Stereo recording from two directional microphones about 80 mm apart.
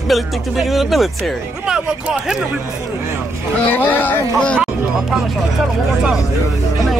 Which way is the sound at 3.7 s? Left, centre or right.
Left.